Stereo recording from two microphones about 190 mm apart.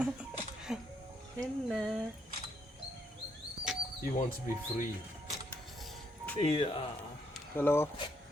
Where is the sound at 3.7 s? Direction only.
Centre (ahead or behind).